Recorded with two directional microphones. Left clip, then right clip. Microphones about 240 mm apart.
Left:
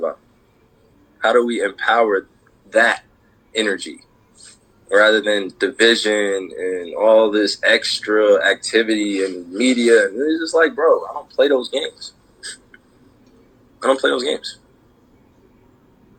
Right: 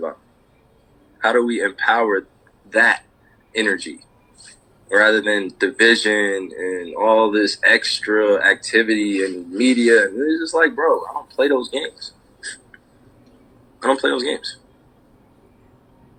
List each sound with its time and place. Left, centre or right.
1.2 s speech: right
13.7 s speech: right